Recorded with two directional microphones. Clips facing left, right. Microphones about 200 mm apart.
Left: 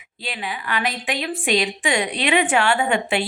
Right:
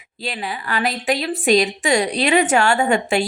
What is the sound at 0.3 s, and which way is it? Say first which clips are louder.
A woman's voice: right 2 dB; 35° right (ahead or behind).